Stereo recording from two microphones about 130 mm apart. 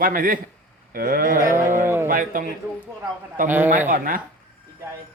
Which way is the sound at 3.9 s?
90° right.